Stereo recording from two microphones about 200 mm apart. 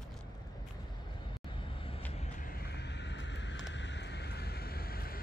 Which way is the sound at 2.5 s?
55° left (ahead or behind).